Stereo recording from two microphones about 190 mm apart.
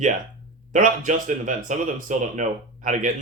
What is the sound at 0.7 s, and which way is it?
Speech, 40° right (ahead or behind).